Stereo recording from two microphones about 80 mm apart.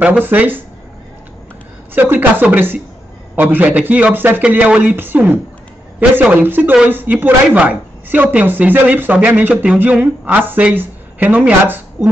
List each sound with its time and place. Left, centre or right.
0.0 s a woman's voice: right
2.0 s a woman's voice: right